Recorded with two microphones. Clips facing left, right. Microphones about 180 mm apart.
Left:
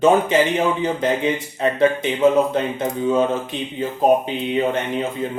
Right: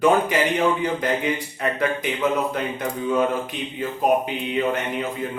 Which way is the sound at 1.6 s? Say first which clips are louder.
Left 6 dB; 25° left (ahead or behind).